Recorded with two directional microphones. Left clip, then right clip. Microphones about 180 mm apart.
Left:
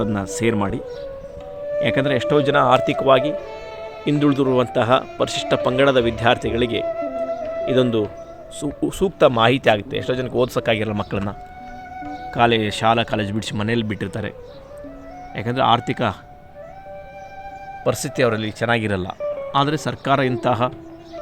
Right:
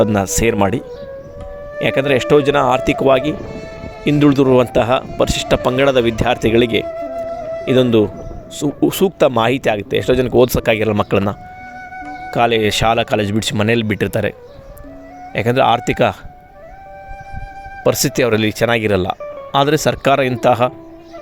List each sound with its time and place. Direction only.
0.0 s speech: 45° right (ahead or behind)
1.8 s speech: 50° right (ahead or behind)
15.4 s speech: 50° right (ahead or behind)
17.8 s speech: 50° right (ahead or behind)